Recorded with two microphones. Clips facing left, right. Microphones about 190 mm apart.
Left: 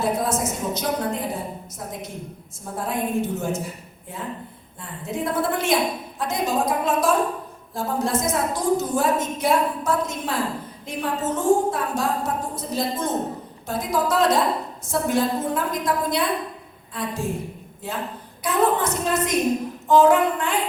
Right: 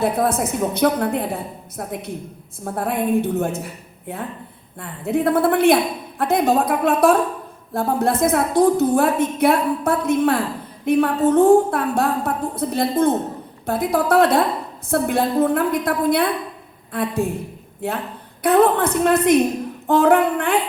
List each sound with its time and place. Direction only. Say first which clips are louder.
0.0 s a woman's voice: right 4 dB; 60° right (ahead or behind)
4.8 s a woman's voice: right 8 dB; 60° right (ahead or behind)